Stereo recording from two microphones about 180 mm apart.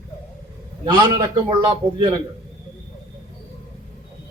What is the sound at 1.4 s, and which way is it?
Speech, 25° right (ahead or behind).